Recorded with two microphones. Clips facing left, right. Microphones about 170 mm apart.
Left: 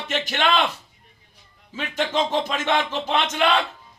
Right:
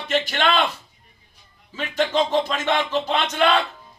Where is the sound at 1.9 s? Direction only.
15° left (ahead or behind).